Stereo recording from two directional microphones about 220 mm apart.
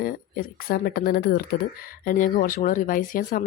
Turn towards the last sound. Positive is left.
turn(degrees=40)  # may be behind; listen again after turning